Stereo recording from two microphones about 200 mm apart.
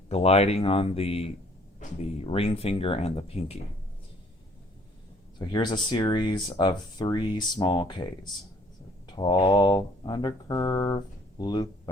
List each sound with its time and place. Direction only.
0.1 s speech: 30° left (ahead or behind)
5.4 s speech: 20° left (ahead or behind)